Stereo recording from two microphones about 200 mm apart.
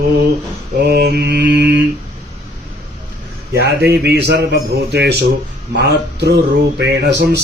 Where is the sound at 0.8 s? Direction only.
55° right (ahead or behind).